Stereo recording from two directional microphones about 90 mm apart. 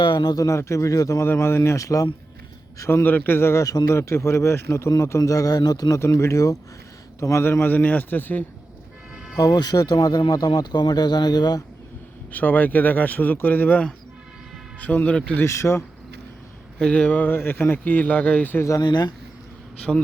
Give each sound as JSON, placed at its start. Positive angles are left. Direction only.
{"t": 0.0, "sound": "a man's voice", "side_deg": 50}
{"t": 1.2, "sound": "a man's voice", "side_deg": 30}
{"t": 3.0, "sound": "a man's voice", "side_deg": 20}
{"t": 6.0, "sound": "a man's voice", "side_deg": 35}
{"t": 9.1, "sound": "vehicle", "side_deg": -5}
{"t": 9.4, "sound": "speech", "side_deg": 50}
{"t": 12.3, "sound": "speech", "side_deg": 20}
{"t": 15.4, "sound": "a man's voice", "side_deg": 30}
{"t": 16.7, "sound": "speech", "side_deg": 10}
{"t": 18.8, "sound": "speech", "side_deg": 55}
{"t": 19.9, "sound": "a man's voice", "side_deg": -5}